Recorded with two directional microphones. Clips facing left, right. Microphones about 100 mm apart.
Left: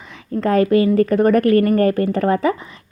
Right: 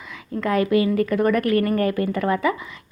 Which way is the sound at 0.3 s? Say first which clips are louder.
Left 5 dB; 35° left (ahead or behind).